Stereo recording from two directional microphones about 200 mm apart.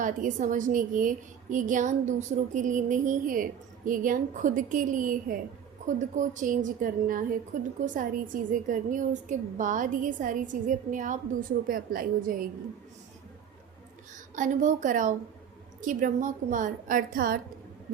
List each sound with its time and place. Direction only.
0.0 s a woman's voice: 40° right (ahead or behind)
14.3 s a woman's voice: 40° right (ahead or behind)